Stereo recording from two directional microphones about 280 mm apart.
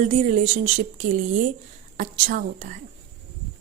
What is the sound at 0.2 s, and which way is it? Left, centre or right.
A woman's voice, right.